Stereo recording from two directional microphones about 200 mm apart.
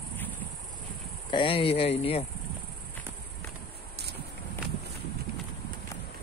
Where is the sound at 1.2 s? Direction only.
25° left (ahead or behind).